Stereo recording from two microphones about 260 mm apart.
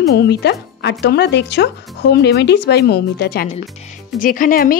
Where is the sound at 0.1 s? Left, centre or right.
Left.